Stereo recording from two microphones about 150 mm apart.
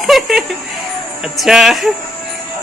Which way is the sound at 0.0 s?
Centre (ahead or behind).